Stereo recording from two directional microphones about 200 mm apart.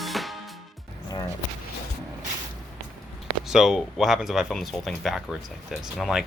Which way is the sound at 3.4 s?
Centre (ahead or behind).